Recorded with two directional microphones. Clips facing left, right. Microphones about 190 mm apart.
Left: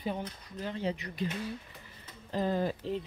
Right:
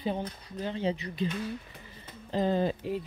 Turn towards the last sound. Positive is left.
turn(degrees=-10)  # may be behind; listen again after turning